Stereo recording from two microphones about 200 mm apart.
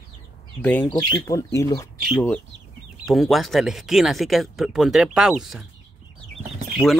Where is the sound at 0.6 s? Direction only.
10° left (ahead or behind).